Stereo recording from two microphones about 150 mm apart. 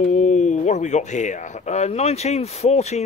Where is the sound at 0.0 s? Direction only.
55° left (ahead or behind).